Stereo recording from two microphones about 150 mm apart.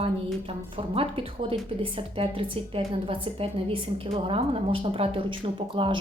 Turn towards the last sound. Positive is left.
turn(degrees=-35)  # may be behind; listen again after turning